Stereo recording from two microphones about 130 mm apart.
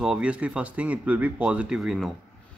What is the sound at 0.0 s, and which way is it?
Speech, 5° right (ahead or behind).